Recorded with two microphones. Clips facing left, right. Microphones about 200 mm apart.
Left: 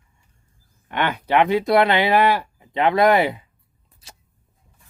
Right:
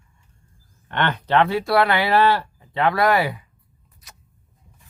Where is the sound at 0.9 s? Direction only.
10° left (ahead or behind).